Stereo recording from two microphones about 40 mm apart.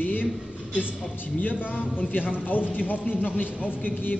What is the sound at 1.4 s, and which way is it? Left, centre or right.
A man's voice, left.